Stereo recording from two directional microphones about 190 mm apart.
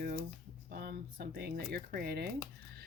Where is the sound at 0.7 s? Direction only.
50° right (ahead or behind).